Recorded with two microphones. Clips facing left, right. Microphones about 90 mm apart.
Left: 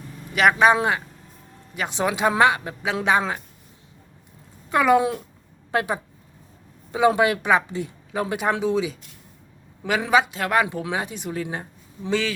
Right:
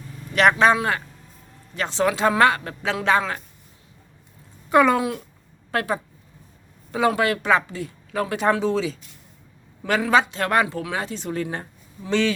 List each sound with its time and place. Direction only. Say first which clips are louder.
0.3 s speech: even; 10° left (ahead or behind)
4.9 s speech: left 4 dB; 25° left (ahead or behind)
10.1 s speech: even; 5° left (ahead or behind)
10.7 s speech: even; 15° left (ahead or behind)